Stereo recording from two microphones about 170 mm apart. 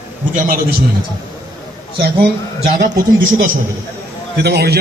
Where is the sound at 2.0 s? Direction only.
70° right (ahead or behind).